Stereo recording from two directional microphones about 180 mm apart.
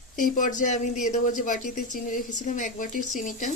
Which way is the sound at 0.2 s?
45° left (ahead or behind).